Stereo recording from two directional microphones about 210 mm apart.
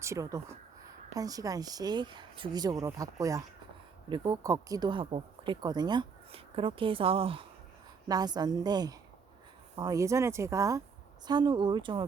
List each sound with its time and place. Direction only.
0.0 s speech: 15° right (ahead or behind)